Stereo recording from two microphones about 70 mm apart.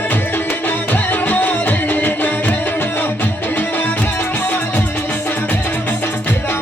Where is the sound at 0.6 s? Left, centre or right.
Left.